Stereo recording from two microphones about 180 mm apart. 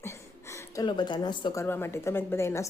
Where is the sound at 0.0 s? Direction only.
15° left (ahead or behind).